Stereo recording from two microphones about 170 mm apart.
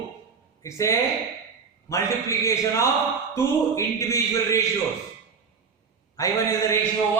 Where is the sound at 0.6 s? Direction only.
15° left (ahead or behind).